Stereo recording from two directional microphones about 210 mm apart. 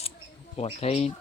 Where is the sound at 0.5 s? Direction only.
30° left (ahead or behind).